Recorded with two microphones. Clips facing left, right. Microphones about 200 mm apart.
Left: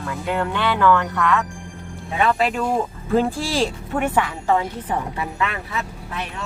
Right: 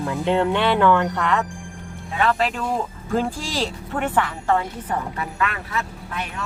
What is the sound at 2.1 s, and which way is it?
A woman's voice, 10° left (ahead or behind).